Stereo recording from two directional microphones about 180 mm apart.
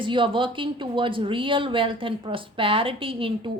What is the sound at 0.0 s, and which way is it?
A woman's voice, 25° right (ahead or behind).